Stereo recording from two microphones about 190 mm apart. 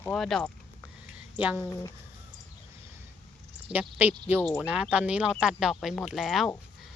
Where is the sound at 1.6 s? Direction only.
15° left (ahead or behind).